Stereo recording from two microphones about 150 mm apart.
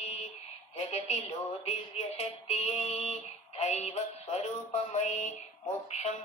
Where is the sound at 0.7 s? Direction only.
50° left (ahead or behind).